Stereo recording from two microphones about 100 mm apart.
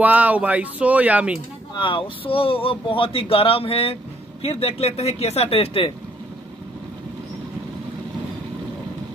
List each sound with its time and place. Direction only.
0.0 s speech: 15° right (ahead or behind)
1.8 s speech: 55° left (ahead or behind)